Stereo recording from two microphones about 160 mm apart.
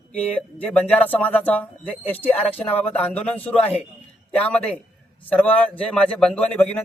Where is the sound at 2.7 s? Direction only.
40° left (ahead or behind).